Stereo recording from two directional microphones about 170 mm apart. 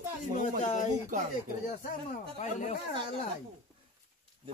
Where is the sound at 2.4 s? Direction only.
45° left (ahead or behind).